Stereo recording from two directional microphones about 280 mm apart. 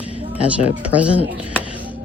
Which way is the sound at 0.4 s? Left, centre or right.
Centre.